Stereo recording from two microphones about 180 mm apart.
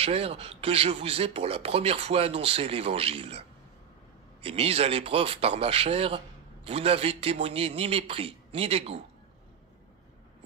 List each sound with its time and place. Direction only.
0.0 s speech: 35° right (ahead or behind)